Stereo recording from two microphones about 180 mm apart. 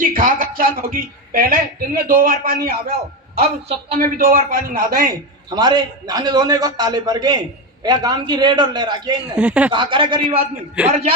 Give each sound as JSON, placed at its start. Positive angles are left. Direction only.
{"t": 0.0, "sound": "a woman's voice", "side_deg": -50}
{"t": 2.9, "sound": "a man's voice", "side_deg": -35}
{"t": 4.0, "sound": "a woman's voice", "side_deg": -50}
{"t": 5.5, "sound": "a man's voice", "side_deg": -25}
{"t": 9.2, "sound": "speech", "side_deg": -5}
{"t": 9.7, "sound": "a man's voice", "side_deg": -25}